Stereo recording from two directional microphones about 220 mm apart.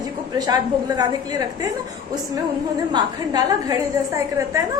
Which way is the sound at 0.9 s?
20° right (ahead or behind).